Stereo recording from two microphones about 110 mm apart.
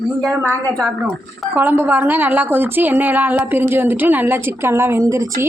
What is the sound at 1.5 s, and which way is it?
A woman's voice, 20° right (ahead or behind).